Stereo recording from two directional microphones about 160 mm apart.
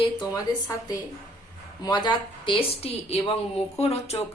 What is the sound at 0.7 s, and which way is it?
A woman's voice, 20° left (ahead or behind).